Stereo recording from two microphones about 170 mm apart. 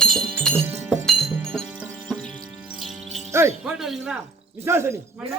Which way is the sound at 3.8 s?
Centre (ahead or behind).